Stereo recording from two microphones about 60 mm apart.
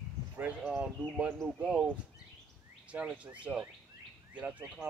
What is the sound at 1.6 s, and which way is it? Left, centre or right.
Speech, centre.